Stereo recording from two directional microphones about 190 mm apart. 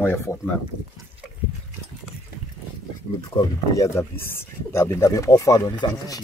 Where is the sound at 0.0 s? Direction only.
10° left (ahead or behind).